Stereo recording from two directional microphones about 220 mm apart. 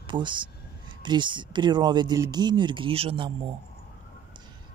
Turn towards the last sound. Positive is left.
turn(degrees=-25)  # may be behind; listen again after turning